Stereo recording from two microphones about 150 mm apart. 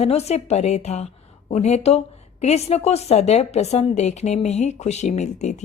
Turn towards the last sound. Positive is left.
turn(degrees=50)  # may be behind; listen again after turning